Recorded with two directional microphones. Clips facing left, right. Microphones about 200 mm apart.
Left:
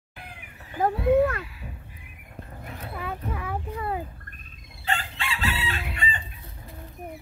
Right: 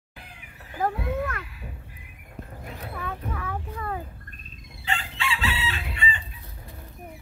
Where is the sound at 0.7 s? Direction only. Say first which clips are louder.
Left 7 dB; 25° left (ahead or behind).